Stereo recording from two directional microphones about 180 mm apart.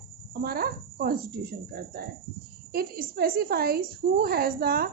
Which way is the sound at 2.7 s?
55° right (ahead or behind).